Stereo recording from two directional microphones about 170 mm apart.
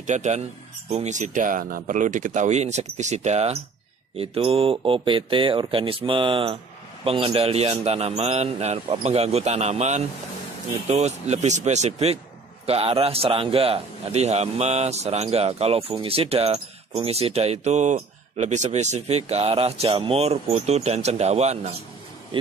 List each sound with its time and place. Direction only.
0.0 s a man's voice: 45° right (ahead or behind)
22.3 s vehicle: 30° right (ahead or behind)